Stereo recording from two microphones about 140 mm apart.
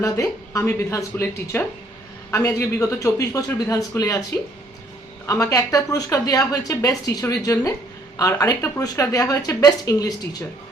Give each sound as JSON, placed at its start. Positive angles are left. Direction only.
{"t": 0.0, "sound": "a woman's voice", "side_deg": 20}
{"t": 5.2, "sound": "a woman's voice", "side_deg": 20}